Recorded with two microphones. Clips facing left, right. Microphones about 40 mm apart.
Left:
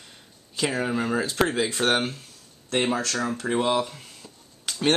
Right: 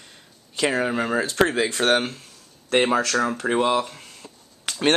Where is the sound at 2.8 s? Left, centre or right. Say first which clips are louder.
Right 5 dB; right.